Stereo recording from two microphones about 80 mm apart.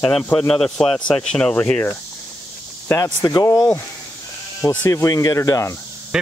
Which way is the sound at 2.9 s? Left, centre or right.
Left.